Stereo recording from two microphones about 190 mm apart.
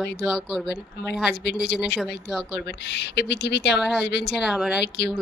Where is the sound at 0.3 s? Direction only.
Centre (ahead or behind).